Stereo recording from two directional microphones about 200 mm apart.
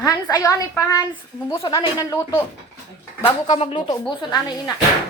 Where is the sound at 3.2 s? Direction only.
30° left (ahead or behind).